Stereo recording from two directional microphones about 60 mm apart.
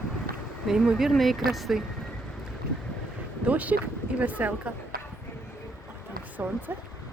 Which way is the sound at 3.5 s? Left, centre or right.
Right.